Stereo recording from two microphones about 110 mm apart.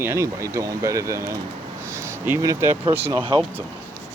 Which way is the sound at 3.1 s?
45° right (ahead or behind).